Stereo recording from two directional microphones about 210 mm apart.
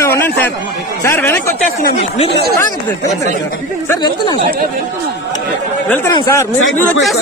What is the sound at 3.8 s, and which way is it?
Speech, 15° left (ahead or behind).